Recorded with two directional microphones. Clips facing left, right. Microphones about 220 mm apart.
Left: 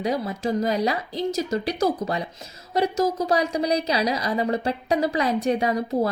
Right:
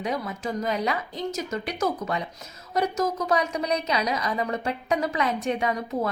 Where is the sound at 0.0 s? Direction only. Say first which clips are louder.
Left 4 dB; 35° left (ahead or behind).